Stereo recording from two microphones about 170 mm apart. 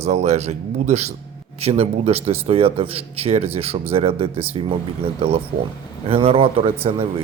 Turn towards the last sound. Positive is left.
turn(degrees=-35)  # may be behind; listen again after turning